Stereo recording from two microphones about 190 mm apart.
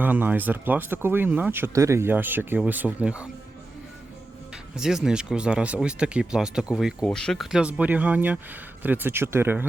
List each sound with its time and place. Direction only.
0.0 s speech: 10° right (ahead or behind)
4.5 s speech: 5° right (ahead or behind)